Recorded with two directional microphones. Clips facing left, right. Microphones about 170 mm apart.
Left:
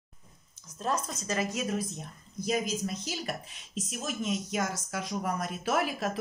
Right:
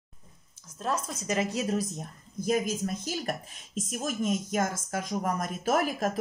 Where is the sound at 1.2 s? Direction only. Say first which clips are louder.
Right 5 dB; 20° right (ahead or behind).